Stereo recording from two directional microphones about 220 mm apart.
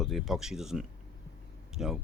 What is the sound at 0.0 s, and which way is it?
Speech, centre (ahead or behind).